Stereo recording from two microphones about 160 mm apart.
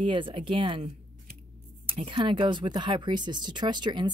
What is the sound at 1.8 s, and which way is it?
Speech, 30° right (ahead or behind).